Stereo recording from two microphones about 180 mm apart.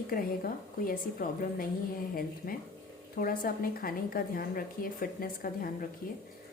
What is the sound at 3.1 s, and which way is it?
A woman's voice, 50° left (ahead or behind).